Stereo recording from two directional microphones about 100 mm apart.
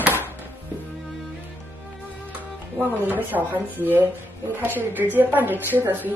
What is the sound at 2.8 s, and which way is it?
Speech, 20° right (ahead or behind).